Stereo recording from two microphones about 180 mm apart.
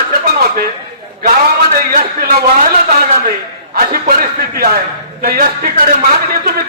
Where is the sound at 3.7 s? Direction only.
55° right (ahead or behind).